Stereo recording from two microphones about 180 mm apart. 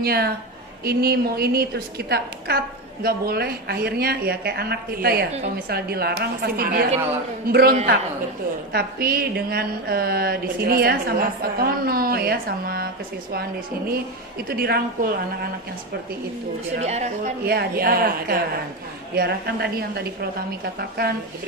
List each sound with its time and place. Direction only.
0.0 s a woman's voice: 60° right (ahead or behind)
14.5 s a woman's voice: 60° right (ahead or behind)
16.8 s speech: 40° right (ahead or behind)
17.5 s a woman's voice: 60° right (ahead or behind)